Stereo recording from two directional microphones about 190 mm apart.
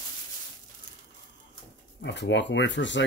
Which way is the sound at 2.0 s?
65° left (ahead or behind).